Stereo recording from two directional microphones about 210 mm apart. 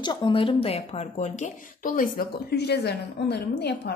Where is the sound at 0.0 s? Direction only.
20° left (ahead or behind).